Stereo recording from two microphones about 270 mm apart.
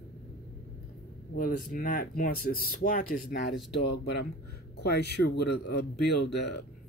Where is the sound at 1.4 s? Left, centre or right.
Left.